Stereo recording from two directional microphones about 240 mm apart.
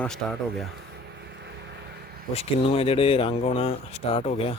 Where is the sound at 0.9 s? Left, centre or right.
Right.